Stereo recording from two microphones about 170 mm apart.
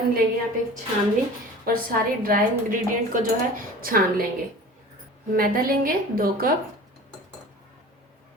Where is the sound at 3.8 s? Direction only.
60° right (ahead or behind).